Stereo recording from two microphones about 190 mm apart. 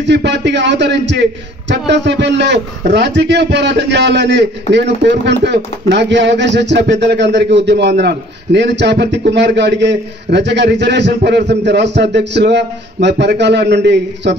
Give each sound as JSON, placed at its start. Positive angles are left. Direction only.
{"t": 0.0, "sound": "a man's voice", "side_deg": -65}